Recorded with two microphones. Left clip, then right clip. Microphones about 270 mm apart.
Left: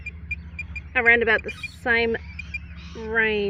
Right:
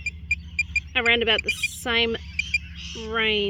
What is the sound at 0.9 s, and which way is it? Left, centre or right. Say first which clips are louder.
Speech: left 3 dB; centre.